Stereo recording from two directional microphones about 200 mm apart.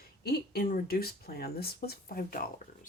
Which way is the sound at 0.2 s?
50° left (ahead or behind).